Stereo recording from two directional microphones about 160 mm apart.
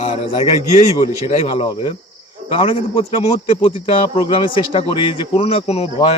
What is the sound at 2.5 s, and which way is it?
Speech, 35° left (ahead or behind).